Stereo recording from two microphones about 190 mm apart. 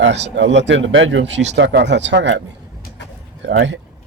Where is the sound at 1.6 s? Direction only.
65° right (ahead or behind).